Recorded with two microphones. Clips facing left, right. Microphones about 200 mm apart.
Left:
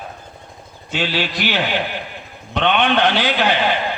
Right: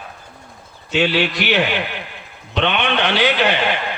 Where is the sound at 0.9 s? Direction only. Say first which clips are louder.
Right 4 dB; 65° right (ahead or behind).